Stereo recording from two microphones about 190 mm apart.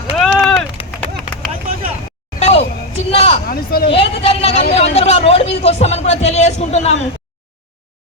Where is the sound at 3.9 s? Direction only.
30° left (ahead or behind).